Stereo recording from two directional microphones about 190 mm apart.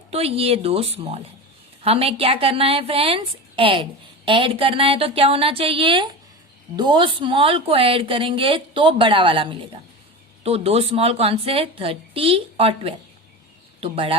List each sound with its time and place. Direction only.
0.1 s a woman's voice: 30° right (ahead or behind)